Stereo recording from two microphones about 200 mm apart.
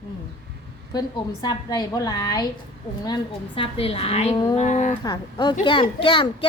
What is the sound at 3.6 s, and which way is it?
A woman's voice, 30° left (ahead or behind).